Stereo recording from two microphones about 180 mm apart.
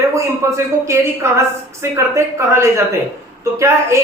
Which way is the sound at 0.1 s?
15° right (ahead or behind).